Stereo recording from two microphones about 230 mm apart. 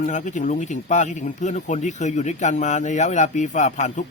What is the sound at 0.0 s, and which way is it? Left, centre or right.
Speech, left.